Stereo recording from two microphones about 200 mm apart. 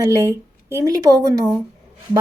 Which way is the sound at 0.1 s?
15° right (ahead or behind).